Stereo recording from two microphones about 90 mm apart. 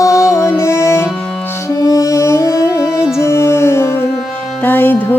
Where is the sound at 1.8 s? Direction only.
40° left (ahead or behind).